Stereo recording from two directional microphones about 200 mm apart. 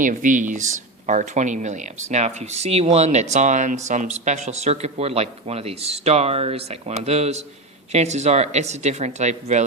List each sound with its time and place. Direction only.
0.0 s speech: 40° right (ahead or behind)